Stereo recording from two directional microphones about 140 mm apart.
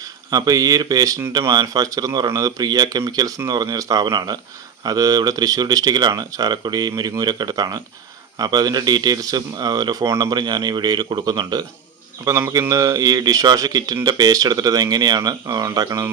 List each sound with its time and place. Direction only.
0.3 s speech: 25° right (ahead or behind)